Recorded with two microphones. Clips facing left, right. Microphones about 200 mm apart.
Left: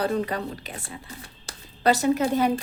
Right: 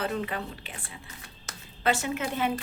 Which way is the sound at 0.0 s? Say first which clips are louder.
Left 5 dB; 40° left (ahead or behind).